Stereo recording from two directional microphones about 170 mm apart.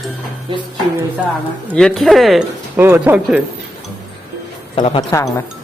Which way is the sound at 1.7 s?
Centre (ahead or behind).